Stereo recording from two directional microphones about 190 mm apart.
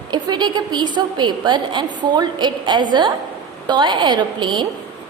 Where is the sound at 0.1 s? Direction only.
25° right (ahead or behind).